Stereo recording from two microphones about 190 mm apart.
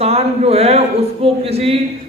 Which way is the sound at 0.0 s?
35° right (ahead or behind).